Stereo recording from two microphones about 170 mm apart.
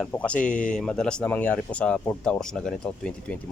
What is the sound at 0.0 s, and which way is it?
Speech, 10° left (ahead or behind).